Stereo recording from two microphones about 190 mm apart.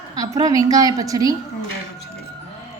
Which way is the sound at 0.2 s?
20° right (ahead or behind).